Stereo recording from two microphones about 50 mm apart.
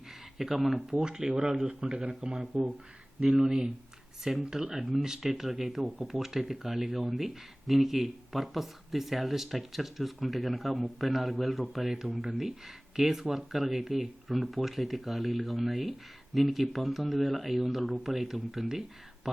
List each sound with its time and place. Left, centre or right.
0.3 s speech: centre
0.9 s a man's voice: centre
2.3 s speech: centre